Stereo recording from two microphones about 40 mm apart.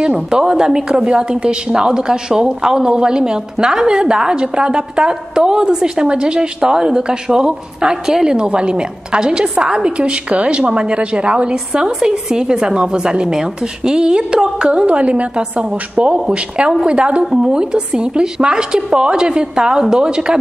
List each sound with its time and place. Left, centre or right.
0.0 s a woman's voice: centre
14.9 s a woman's voice: right
17.2 s a woman's voice: centre